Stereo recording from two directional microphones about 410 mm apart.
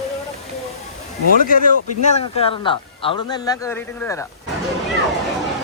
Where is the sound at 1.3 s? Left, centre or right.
Centre.